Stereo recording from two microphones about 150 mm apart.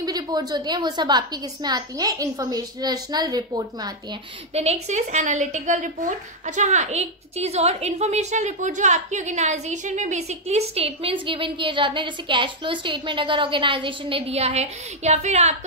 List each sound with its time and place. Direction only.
0.0 s a woman's voice: 25° right (ahead or behind)
4.6 s a woman's voice: 45° right (ahead or behind)